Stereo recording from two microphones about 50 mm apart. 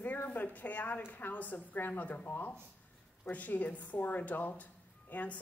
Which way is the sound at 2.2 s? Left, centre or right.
Left.